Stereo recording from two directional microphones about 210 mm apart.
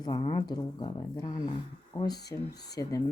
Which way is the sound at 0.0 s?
20° left (ahead or behind).